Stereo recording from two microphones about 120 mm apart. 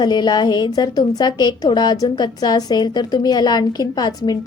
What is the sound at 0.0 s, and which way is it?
A woman's voice, 35° left (ahead or behind).